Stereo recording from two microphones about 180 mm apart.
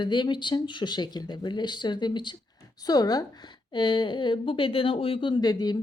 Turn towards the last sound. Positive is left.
turn(degrees=20)  # may be behind; listen again after turning